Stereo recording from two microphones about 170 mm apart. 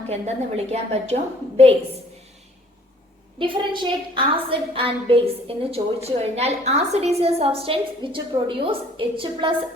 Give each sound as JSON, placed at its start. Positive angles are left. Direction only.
{"t": 0.1, "sound": "a woman's voice", "side_deg": -40}
{"t": 3.3, "sound": "a woman's voice", "side_deg": -30}